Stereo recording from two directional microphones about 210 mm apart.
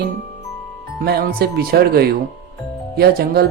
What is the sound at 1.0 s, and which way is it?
Speech, 45° right (ahead or behind).